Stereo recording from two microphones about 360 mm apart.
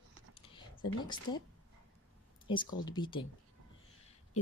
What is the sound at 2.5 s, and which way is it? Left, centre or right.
Speech, centre.